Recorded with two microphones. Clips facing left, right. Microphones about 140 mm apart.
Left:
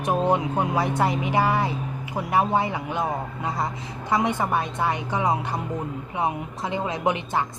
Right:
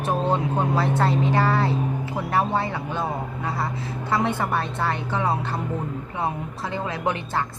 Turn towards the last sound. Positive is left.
turn(degrees=15)  # may be behind; listen again after turning